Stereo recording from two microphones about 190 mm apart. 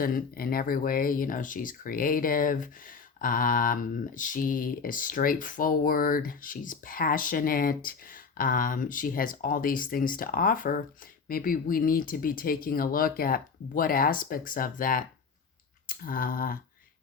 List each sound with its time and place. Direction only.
0.0 s speech: 50° left (ahead or behind)